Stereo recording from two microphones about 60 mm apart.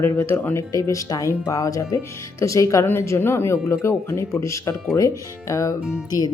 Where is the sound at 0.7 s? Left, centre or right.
Left.